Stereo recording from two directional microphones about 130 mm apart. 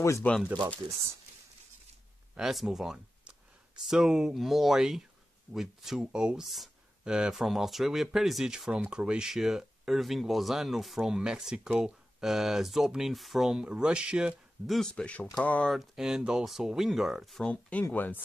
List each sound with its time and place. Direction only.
0.0 s speech: 20° left (ahead or behind)
2.3 s speech: centre (ahead or behind); by 18.2 s 15° left (ahead or behind)